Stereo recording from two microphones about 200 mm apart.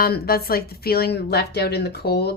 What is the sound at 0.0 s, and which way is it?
A woman's voice, 50° left (ahead or behind).